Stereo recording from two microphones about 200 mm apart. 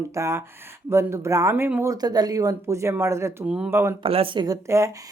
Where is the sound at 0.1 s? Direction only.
15° right (ahead or behind).